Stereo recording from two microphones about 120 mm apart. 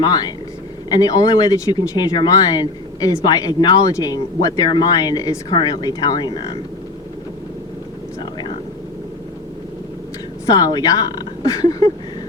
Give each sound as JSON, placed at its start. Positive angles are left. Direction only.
{"t": 0.0, "sound": "speech", "side_deg": 35}
{"t": 8.2, "sound": "vehicle", "side_deg": 40}
{"t": 10.4, "sound": "speech", "side_deg": 30}
{"t": 11.6, "sound": "a sound", "side_deg": 35}